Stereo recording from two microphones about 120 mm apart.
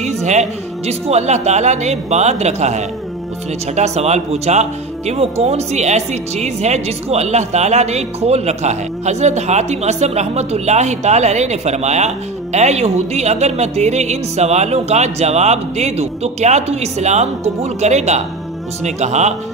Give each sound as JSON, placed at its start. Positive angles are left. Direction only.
{"t": 0.0, "sound": "speech", "side_deg": -75}